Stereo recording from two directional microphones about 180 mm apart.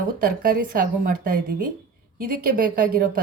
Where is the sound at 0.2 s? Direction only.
55° right (ahead or behind).